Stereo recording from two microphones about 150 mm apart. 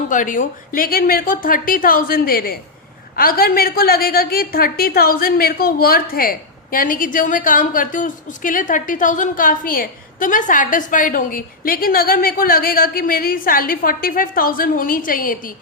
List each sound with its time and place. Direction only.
0.1 s a woman's voice: 60° left (ahead or behind)